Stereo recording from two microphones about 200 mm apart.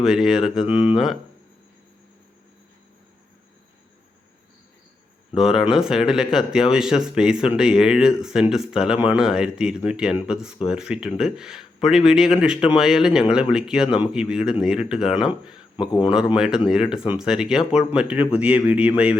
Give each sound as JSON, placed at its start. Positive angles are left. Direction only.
{"t": 0.0, "sound": "speech", "side_deg": 0}
{"t": 5.4, "sound": "speech", "side_deg": 0}
{"t": 15.7, "sound": "speech", "side_deg": 25}
{"t": 16.1, "sound": "speech", "side_deg": -5}